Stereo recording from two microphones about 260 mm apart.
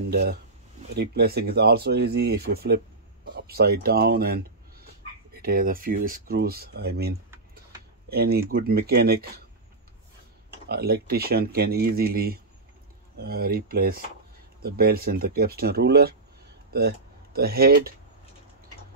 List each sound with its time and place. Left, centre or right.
0.1 s speech: right
10.7 s speech: right